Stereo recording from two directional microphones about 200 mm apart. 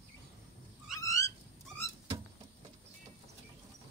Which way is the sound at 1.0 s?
15° left (ahead or behind).